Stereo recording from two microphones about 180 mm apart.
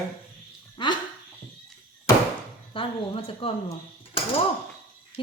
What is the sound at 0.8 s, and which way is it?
Dog, 25° left (ahead or behind).